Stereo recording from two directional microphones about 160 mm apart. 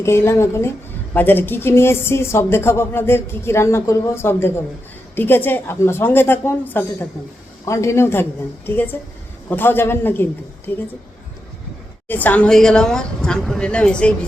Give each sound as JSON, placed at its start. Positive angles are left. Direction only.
{"t": 0.0, "sound": "a woman's voice", "side_deg": 15}
{"t": 12.0, "sound": "a woman's voice", "side_deg": 10}